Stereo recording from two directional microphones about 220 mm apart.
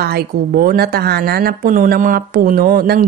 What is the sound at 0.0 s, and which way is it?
A woman's voice, 45° right (ahead or behind).